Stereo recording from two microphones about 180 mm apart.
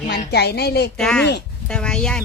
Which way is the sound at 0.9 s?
5° left (ahead or behind).